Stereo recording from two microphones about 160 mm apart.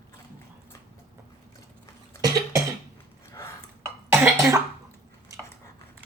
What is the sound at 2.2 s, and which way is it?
Cough, 25° right (ahead or behind).